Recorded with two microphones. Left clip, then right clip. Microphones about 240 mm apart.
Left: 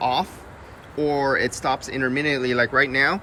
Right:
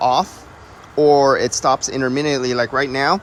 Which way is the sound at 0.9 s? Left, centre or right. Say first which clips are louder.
Right 9 dB; centre.